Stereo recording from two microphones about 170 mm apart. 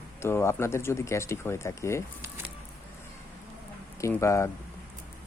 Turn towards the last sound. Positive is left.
turn(degrees=15)  # may be behind; listen again after turning